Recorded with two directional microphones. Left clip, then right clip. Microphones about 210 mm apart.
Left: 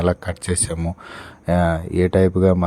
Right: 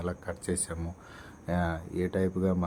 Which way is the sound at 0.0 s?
45° left (ahead or behind).